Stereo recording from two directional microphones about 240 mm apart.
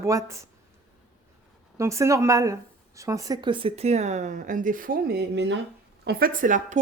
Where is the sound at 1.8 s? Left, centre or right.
Centre.